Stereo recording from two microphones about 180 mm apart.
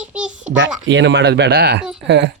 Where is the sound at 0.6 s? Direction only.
85° right.